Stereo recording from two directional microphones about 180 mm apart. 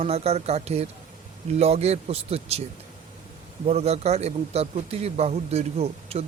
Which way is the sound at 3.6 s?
35° right (ahead or behind).